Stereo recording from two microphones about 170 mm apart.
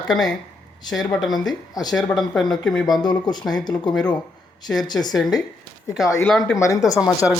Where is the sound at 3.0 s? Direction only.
25° left (ahead or behind).